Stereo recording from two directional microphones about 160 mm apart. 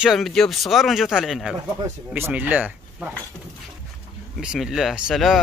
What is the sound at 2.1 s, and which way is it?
Speech, 10° right (ahead or behind).